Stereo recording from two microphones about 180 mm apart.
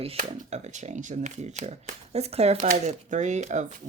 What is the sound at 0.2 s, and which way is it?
Speech, 40° right (ahead or behind).